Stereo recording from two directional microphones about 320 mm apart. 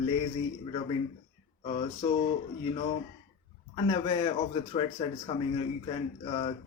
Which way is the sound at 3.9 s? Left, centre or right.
Centre.